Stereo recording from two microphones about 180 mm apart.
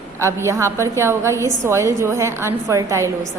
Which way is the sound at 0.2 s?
15° right (ahead or behind).